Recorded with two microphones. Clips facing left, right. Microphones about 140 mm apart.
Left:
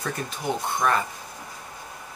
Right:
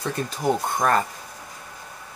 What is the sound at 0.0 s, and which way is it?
Speech, 35° right (ahead or behind).